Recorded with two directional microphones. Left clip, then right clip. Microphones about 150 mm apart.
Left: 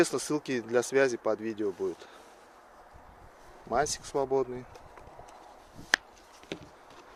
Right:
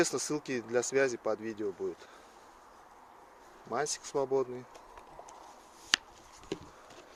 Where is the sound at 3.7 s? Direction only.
25° left (ahead or behind).